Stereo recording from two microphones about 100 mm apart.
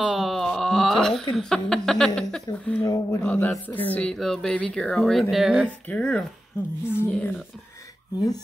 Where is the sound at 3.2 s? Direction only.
20° left (ahead or behind); by 5.7 s 5° right (ahead or behind).